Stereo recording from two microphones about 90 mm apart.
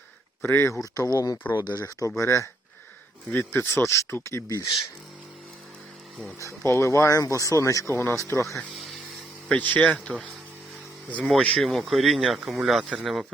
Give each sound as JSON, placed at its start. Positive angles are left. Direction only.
{"t": 0.4, "sound": "speech", "side_deg": 30}
{"t": 0.8, "sound": "speech", "side_deg": 40}
{"t": 3.2, "sound": "speech", "side_deg": 25}
{"t": 6.4, "sound": "speech", "side_deg": 30}
{"t": 9.5, "sound": "speech", "side_deg": 15}
{"t": 11.4, "sound": "speech", "side_deg": 10}
{"t": 11.7, "sound": "speech", "side_deg": 0}